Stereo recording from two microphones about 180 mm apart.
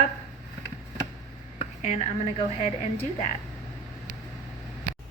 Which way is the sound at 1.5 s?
35° left (ahead or behind).